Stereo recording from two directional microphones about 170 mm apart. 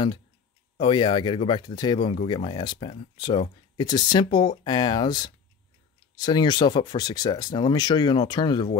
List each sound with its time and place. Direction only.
0.7 s speech: 30° left (ahead or behind)